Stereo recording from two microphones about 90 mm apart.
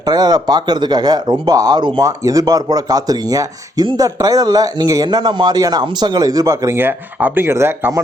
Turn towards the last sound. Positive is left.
turn(degrees=-30)  # may be behind; listen again after turning